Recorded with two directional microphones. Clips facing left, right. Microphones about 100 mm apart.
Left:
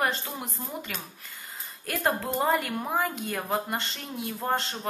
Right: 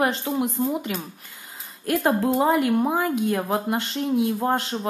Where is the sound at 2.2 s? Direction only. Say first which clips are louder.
Right 6 dB; 10° right (ahead or behind).